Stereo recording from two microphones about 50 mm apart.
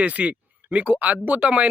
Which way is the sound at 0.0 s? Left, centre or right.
Right.